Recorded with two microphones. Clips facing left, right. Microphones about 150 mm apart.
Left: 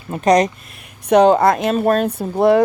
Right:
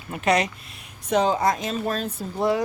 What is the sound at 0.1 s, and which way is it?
Speech, 40° left (ahead or behind).